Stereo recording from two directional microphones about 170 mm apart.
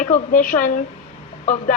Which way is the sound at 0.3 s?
55° left (ahead or behind).